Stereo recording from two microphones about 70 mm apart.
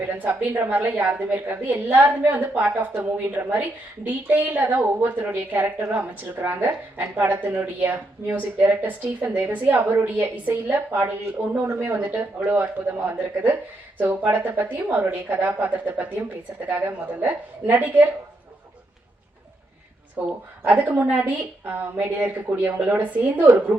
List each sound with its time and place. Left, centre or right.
0.1 s speech: right
11.9 s speech: right
20.1 s speech: right